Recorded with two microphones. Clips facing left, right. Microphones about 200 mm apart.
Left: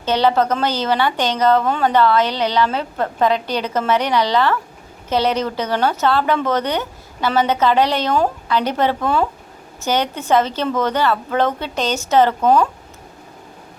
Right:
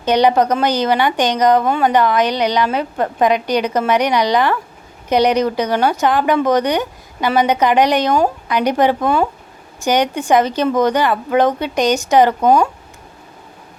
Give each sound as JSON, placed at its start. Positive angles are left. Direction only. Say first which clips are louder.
{"t": 0.0, "sound": "a woman's voice", "louder": "right 3 dB", "side_deg": -15}